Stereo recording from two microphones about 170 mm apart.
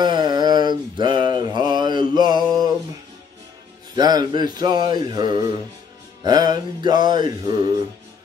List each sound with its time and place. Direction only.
0.0 s mantra: 25° right (ahead or behind)
3.9 s music: 25° right (ahead or behind)